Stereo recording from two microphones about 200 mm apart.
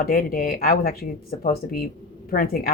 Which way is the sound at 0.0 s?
45° left (ahead or behind).